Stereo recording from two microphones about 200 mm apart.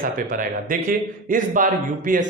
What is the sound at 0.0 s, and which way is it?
Speech, 45° right (ahead or behind).